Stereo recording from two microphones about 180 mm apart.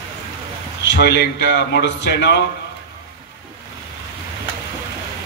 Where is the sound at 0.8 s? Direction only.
75° left (ahead or behind).